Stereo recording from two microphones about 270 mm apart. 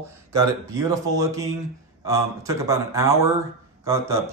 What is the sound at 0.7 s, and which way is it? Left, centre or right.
Speech, centre.